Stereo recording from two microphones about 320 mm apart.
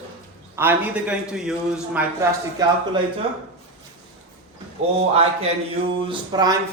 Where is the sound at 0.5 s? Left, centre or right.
Centre.